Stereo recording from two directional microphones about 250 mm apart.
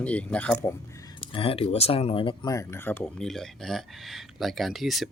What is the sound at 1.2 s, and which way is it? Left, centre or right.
Speech, left.